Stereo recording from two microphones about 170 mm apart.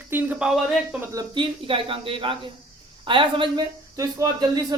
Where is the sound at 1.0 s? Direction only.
20° right (ahead or behind).